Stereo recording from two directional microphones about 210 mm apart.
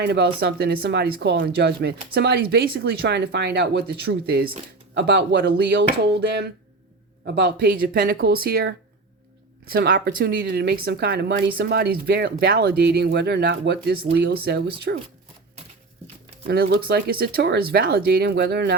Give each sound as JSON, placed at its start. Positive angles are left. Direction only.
{"t": 0.0, "sound": "speech", "side_deg": -50}
{"t": 16.5, "sound": "speech", "side_deg": -50}